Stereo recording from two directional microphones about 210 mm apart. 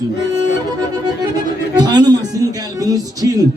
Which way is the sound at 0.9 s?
20° right (ahead or behind).